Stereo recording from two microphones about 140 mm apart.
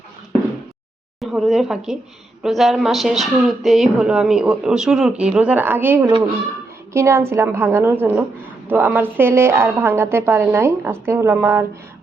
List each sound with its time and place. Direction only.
1.2 s a woman's voice: centre (ahead or behind)